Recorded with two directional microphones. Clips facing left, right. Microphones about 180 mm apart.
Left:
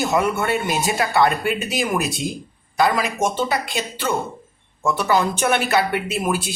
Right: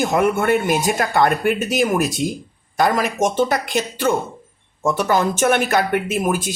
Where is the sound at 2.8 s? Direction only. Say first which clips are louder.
Right 2 dB; 50° right (ahead or behind).